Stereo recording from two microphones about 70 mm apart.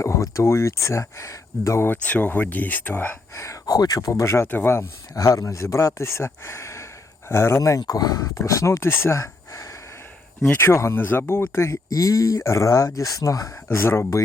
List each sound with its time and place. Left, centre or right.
0.0 s speech: left
1.9 s speech: left
3.3 s speech: left
3.7 s speech: left
5.1 s speech: left
7.8 s speech: left
11.7 s speech: left
13.7 s speech: left